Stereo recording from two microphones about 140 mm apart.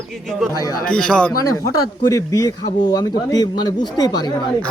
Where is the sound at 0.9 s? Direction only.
5° left (ahead or behind).